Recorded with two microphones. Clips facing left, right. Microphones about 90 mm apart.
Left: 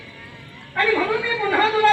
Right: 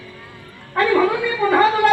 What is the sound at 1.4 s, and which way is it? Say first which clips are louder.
Gargling: right 3 dB; 20° right (ahead or behind).